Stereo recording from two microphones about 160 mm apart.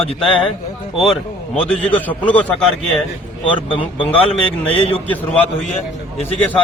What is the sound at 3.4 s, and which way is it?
Speech, 30° left (ahead or behind).